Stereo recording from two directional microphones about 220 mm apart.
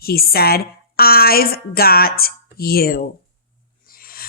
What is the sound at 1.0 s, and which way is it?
A woman's voice, 45° left (ahead or behind).